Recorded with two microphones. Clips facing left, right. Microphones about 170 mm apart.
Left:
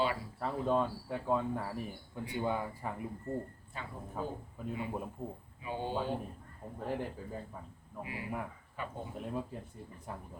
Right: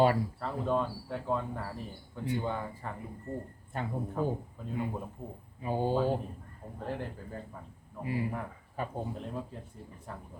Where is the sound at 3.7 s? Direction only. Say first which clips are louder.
Right 8 dB; 55° right (ahead or behind).